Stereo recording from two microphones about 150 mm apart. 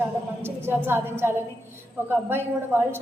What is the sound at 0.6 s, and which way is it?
A woman's voice, 15° right (ahead or behind).